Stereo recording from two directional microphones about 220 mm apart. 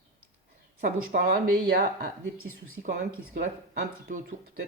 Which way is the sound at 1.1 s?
40° right (ahead or behind).